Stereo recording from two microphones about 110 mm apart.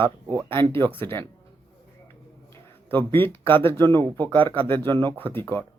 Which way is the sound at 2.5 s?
20° left (ahead or behind).